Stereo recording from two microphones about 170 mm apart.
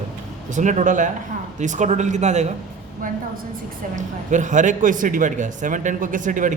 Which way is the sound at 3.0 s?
55° right (ahead or behind).